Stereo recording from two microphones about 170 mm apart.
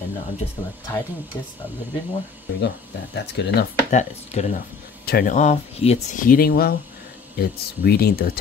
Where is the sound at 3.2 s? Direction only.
80° left.